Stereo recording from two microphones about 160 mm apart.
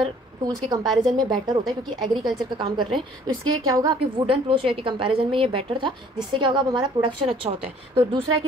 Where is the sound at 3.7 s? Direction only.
25° right (ahead or behind).